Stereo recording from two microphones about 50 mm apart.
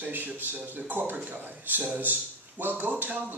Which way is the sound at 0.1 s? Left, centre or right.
Right.